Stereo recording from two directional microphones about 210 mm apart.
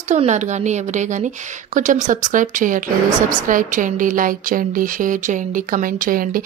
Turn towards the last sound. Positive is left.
turn(degrees=-40)  # may be behind; listen again after turning